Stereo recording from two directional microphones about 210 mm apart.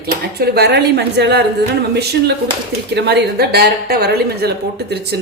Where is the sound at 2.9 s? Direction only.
55° right (ahead or behind).